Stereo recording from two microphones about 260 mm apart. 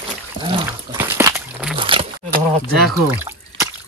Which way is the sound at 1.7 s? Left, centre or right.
Centre.